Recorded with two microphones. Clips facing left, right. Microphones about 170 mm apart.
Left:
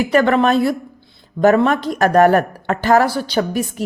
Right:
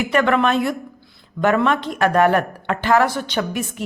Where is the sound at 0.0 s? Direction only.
35° left (ahead or behind).